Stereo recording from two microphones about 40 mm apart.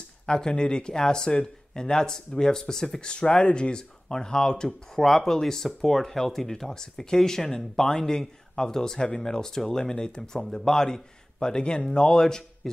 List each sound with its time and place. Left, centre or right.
0.3 s speech: left
4.9 s speech: centre